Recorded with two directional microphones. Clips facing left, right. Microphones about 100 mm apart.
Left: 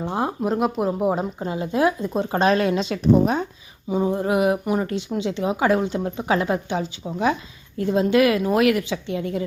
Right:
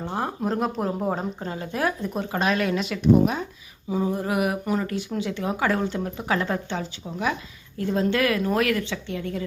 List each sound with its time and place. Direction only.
0.0 s speech: 20° left (ahead or behind)
0.4 s speech: 5° left (ahead or behind)
2.3 s a woman's voice: 35° left (ahead or behind)
3.8 s speech: 25° left (ahead or behind)